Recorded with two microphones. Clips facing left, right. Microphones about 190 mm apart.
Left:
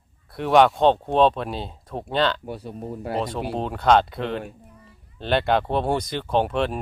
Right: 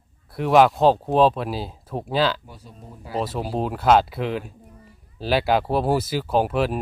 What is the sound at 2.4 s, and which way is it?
Speech, 65° left (ahead or behind).